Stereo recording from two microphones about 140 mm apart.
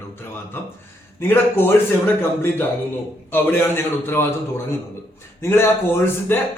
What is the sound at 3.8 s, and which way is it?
Speech, 15° left (ahead or behind).